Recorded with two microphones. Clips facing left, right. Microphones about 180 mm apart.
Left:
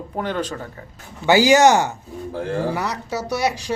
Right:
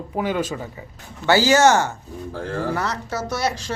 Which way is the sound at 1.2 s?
15° left (ahead or behind).